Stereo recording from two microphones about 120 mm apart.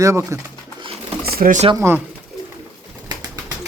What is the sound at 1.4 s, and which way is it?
Speech, 90° right.